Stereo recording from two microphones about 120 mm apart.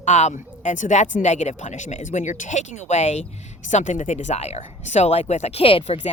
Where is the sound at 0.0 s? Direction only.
75° left (ahead or behind).